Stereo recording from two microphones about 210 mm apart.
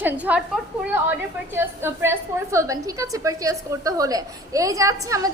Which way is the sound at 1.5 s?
10° right (ahead or behind).